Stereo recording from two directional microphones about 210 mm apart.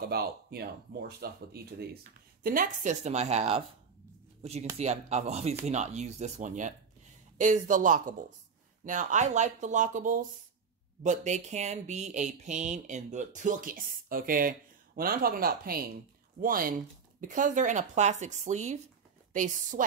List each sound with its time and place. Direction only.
0.0 s speech: 50° right (ahead or behind); by 3.6 s 30° right (ahead or behind)
4.7 s speech: 30° right (ahead or behind)